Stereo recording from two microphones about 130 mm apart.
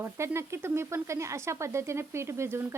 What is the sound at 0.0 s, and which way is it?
Speech, 20° right (ahead or behind).